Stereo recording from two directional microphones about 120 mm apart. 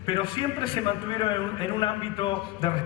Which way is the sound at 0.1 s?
45° left (ahead or behind).